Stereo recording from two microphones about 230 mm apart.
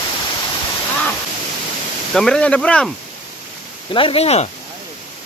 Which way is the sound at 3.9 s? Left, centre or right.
Left.